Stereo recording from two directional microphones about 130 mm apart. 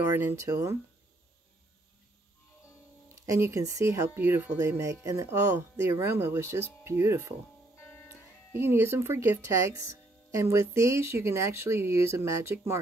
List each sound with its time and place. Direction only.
0.2 s speech: 20° right (ahead or behind)
3.2 s speech: 20° right (ahead or behind)
8.5 s speech: 20° right (ahead or behind)